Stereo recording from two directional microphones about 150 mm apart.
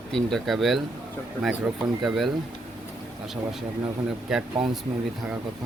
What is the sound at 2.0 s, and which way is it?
Speech, centre (ahead or behind).